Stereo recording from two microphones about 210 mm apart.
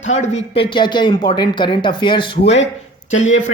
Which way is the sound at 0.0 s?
35° left (ahead or behind).